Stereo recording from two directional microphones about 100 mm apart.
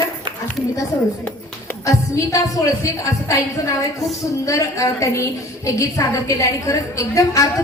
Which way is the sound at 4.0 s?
35° left (ahead or behind).